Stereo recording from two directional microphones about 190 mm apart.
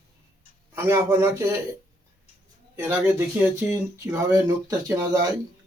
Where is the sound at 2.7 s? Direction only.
10° right (ahead or behind).